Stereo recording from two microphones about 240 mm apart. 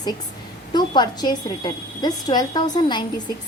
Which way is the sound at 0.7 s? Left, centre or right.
Centre.